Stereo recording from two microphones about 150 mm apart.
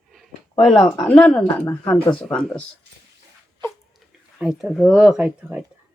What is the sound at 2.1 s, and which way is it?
Speech, 5° left (ahead or behind).